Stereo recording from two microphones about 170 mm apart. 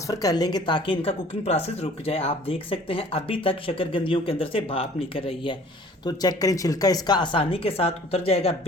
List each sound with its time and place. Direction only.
0.1 s speech: 20° left (ahead or behind); by 8.5 s 35° left (ahead or behind)